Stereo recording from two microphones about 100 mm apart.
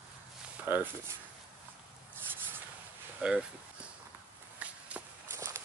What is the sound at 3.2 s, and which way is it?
Speech, 15° right (ahead or behind).